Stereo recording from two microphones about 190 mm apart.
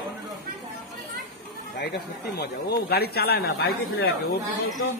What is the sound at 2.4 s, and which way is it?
Speech, 55° left (ahead or behind).